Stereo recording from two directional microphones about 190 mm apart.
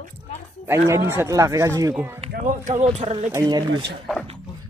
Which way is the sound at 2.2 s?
35° right (ahead or behind).